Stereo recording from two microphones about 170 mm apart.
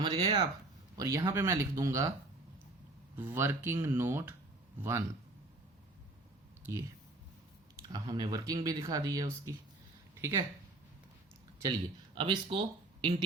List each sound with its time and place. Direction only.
0.0 s speech: 25° right (ahead or behind)
3.2 s speech: 10° right (ahead or behind)
6.7 s speech: 15° right (ahead or behind)
12.1 s speech: 30° right (ahead or behind)